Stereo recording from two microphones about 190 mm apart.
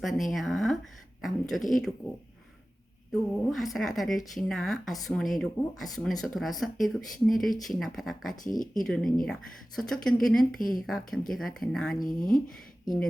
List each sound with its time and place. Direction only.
0.0 s speech: centre (ahead or behind)
3.1 s speech: centre (ahead or behind)
8.5 s speech: 45° left (ahead or behind)
8.8 s speech: centre (ahead or behind)
12.0 s speech: 45° left (ahead or behind)